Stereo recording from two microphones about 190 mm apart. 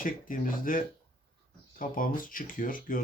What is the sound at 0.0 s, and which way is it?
Speech, 45° left (ahead or behind).